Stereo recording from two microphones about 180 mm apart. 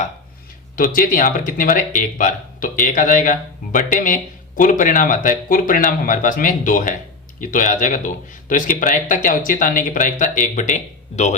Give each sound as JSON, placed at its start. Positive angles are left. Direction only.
{"t": 0.8, "sound": "speech", "side_deg": 50}